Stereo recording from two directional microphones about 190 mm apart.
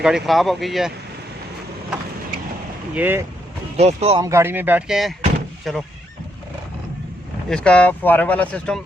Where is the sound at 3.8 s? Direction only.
35° right (ahead or behind).